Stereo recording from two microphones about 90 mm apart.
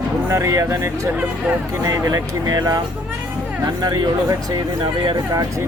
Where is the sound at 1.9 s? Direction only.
40° right (ahead or behind).